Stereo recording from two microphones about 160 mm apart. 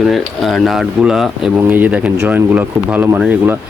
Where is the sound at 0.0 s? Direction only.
Centre (ahead or behind).